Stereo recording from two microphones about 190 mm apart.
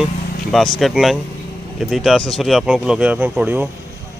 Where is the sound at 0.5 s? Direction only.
Centre (ahead or behind).